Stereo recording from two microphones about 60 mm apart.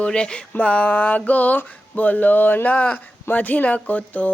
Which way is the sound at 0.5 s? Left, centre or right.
Left.